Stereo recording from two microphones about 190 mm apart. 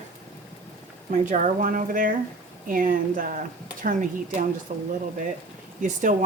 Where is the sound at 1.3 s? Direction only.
40° right (ahead or behind).